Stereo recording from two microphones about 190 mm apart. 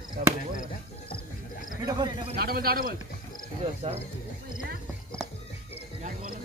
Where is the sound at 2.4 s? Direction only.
50° right (ahead or behind).